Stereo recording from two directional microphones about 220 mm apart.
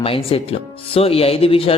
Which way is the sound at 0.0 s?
25° left (ahead or behind).